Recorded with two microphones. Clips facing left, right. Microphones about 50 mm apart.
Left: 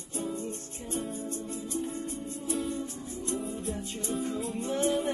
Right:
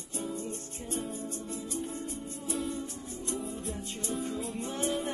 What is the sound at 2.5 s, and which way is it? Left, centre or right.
Music, centre.